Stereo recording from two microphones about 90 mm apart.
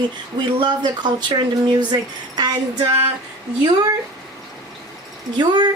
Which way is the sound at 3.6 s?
45° right (ahead or behind).